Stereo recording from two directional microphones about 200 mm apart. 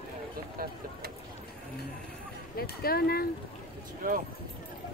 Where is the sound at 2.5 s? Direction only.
50° left (ahead or behind).